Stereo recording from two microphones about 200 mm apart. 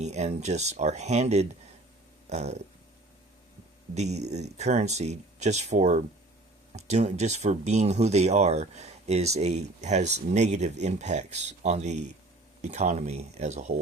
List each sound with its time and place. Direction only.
0.0 s speech: 35° right (ahead or behind)
3.9 s speech: 35° right (ahead or behind)